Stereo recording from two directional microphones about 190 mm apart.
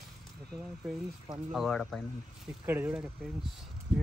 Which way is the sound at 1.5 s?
Centre (ahead or behind).